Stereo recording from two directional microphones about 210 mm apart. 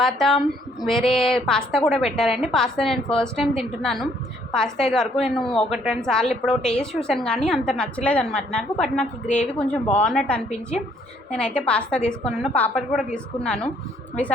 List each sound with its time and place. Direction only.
0.0 s a woman's voice: centre (ahead or behind)